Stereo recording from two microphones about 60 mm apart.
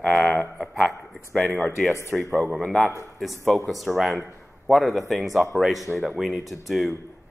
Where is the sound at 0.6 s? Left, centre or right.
Centre.